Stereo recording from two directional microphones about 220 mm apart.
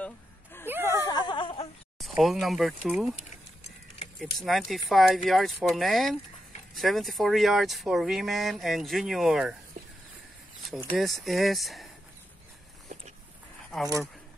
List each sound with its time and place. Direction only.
0.0 s a sound: 10° left (ahead or behind)
2.0 s speech: centre (ahead or behind)
4.2 s speech: centre (ahead or behind)
10.8 s speech: centre (ahead or behind)